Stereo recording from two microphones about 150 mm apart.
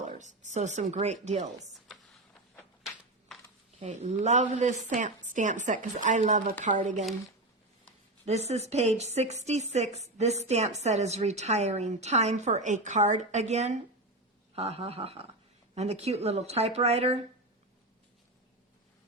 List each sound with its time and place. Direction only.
0.0 s a woman's voice: 50° right (ahead or behind)
3.8 s a woman's voice: 50° right (ahead or behind)
8.2 s a woman's voice: 45° right (ahead or behind)